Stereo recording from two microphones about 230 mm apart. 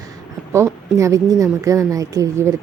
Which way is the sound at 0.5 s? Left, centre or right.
Centre.